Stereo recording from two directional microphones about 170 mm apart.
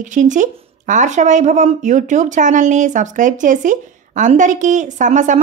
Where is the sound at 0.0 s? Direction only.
45° right (ahead or behind).